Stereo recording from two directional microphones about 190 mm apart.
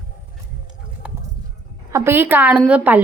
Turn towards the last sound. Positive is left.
turn(degrees=-10)  # may be behind; listen again after turning